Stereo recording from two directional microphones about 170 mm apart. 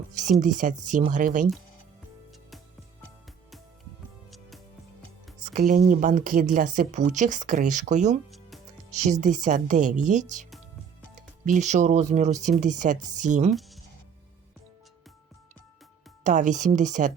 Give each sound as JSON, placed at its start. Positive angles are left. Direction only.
{"t": 0.1, "sound": "speech", "side_deg": -45}
{"t": 4.3, "sound": "music", "side_deg": 0}
{"t": 5.4, "sound": "speech", "side_deg": -55}
{"t": 8.3, "sound": "music", "side_deg": 0}
{"t": 8.9, "sound": "speech", "side_deg": -45}
{"t": 11.4, "sound": "speech", "side_deg": -45}
{"t": 13.5, "sound": "music", "side_deg": 0}
{"t": 16.2, "sound": "speech", "side_deg": -45}